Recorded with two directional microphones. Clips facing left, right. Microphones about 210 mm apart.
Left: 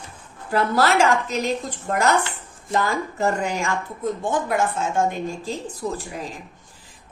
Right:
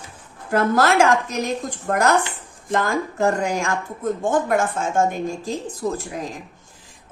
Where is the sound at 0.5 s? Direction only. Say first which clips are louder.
Right 2 dB; 45° right (ahead or behind).